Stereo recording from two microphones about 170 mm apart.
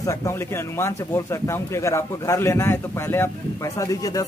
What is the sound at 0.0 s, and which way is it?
Speech, 20° left (ahead or behind).